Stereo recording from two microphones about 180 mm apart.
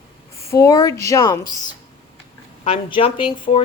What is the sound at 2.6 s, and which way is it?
Speech, 30° left (ahead or behind).